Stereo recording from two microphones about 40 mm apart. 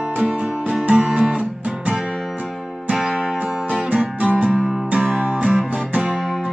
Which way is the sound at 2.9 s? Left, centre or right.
Centre.